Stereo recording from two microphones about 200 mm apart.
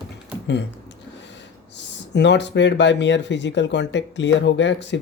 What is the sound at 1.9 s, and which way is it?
Speech, 60° left (ahead or behind).